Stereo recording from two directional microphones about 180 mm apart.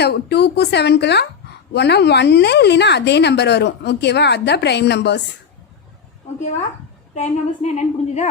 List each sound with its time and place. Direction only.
0.0 s a woman's voice: 65° left (ahead or behind)
7.1 s a woman's voice: 40° left (ahead or behind)